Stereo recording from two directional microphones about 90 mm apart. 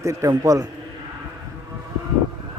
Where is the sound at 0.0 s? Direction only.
35° right (ahead or behind).